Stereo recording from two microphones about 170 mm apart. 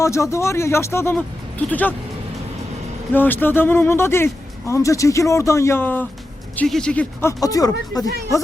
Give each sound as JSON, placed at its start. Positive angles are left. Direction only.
{"t": 0.0, "sound": "speech", "side_deg": 15}
{"t": 3.1, "sound": "speech", "side_deg": 10}